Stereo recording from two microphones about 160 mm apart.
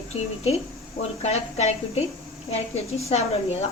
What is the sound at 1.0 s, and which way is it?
Speech, 45° left (ahead or behind).